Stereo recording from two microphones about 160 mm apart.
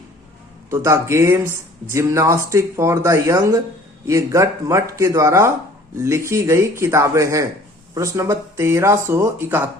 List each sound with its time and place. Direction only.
0.7 s speech: 15° right (ahead or behind)